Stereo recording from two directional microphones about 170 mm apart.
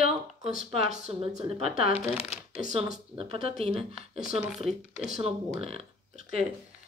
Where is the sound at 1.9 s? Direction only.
10° right (ahead or behind).